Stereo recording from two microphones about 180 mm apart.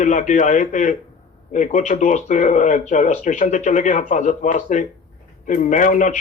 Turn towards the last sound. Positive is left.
turn(degrees=45)  # may be behind; listen again after turning